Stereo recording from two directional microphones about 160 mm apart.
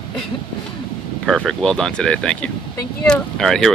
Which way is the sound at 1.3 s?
Centre (ahead or behind).